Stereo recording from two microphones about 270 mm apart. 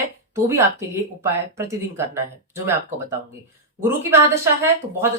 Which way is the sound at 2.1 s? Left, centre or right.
Centre.